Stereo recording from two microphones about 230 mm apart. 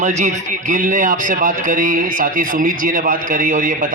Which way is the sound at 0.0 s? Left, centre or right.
Right.